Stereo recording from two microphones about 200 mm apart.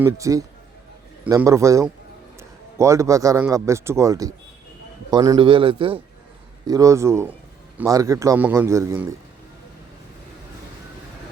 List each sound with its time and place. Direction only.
0.0 s a man's voice: 15° right (ahead or behind)